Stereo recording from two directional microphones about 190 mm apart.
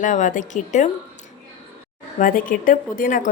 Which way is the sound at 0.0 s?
40° left (ahead or behind).